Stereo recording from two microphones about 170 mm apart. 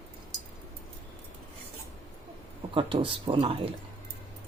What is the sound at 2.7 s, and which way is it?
Speech, 30° right (ahead or behind).